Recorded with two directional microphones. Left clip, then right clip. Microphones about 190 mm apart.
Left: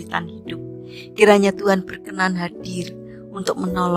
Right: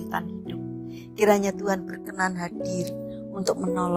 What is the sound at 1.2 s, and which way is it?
Speech, 50° left (ahead or behind).